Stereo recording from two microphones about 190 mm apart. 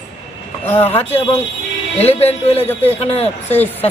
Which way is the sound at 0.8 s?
30° left (ahead or behind).